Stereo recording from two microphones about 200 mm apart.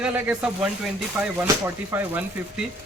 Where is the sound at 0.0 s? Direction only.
5° right (ahead or behind).